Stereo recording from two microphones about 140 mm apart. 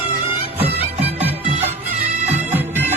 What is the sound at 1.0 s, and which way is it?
Music, 50° right (ahead or behind).